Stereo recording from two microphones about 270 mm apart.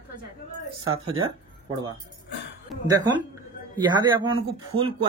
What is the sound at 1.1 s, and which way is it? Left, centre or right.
Speech, centre.